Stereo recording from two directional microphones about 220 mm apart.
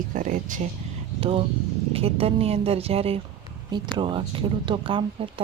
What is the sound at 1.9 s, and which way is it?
Speech, 25° right (ahead or behind).